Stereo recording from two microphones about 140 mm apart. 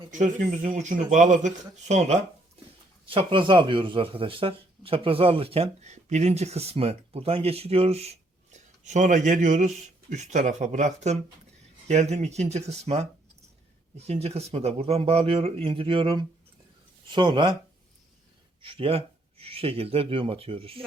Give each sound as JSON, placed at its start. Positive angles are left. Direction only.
{"t": 0.1, "sound": "speech", "side_deg": -60}
{"t": 3.1, "sound": "speech", "side_deg": -40}
{"t": 18.6, "sound": "speech", "side_deg": -40}